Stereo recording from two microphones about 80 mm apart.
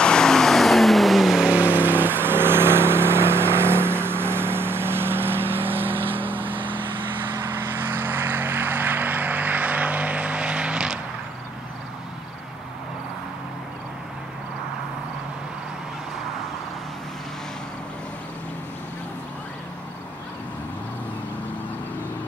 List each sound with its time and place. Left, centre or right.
0.0 s vehicle: centre
1.5 s vehicle: right
6.5 s vehicle: right
7.4 s vehicle: right; by 11.0 s centre